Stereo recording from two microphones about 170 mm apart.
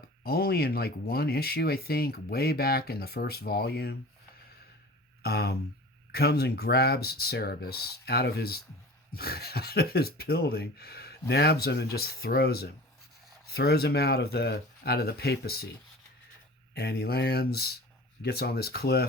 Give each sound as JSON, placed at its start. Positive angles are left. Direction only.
{"t": 0.2, "sound": "speech", "side_deg": 65}
{"t": 5.2, "sound": "speech", "side_deg": 70}
{"t": 16.7, "sound": "speech", "side_deg": 70}